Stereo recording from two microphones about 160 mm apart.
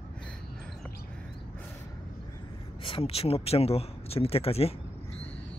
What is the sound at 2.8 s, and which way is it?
Speech, 35° left (ahead or behind).